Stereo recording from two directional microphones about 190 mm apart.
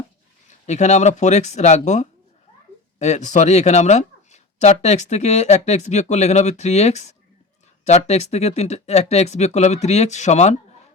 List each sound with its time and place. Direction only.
0.7 s speech: 35° left (ahead or behind)